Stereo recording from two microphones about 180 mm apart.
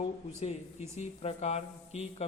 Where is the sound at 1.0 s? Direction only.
40° left (ahead or behind).